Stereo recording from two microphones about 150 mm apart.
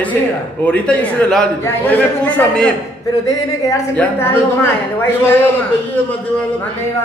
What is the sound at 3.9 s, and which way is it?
Speech, 15° left (ahead or behind).